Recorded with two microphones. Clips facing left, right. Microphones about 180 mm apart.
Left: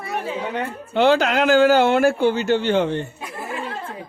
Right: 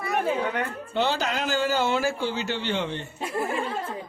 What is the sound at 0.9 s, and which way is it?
Speech, 70° left (ahead or behind).